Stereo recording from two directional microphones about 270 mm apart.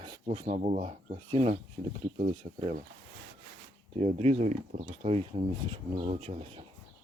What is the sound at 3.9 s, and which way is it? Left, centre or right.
Speech, right.